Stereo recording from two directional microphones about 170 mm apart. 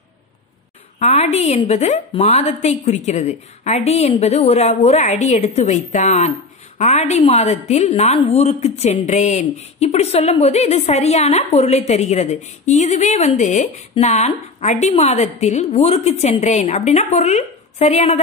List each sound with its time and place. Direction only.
0.9 s a woman's voice: 40° left (ahead or behind)